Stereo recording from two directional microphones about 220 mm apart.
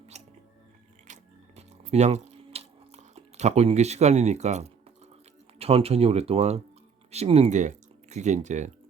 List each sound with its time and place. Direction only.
0.1 s chewing: 30° right (ahead or behind)
1.0 s a sound: 30° right (ahead or behind)
5.5 s speech: 25° right (ahead or behind)